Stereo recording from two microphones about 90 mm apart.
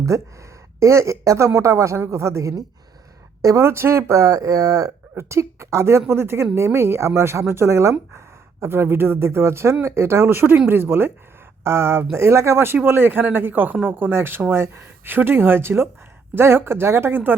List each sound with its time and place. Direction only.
0.1 s speech: 35° right (ahead or behind)